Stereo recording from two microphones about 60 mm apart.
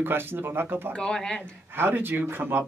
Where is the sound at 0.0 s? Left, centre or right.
Right.